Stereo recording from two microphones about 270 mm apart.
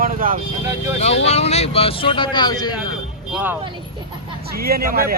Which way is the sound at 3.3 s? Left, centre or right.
Centre.